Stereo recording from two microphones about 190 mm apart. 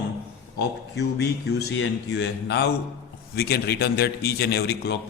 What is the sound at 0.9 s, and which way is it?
A man's voice, 60° left (ahead or behind).